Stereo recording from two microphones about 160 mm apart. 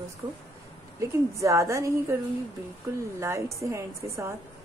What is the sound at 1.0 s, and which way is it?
Speech, 20° right (ahead or behind).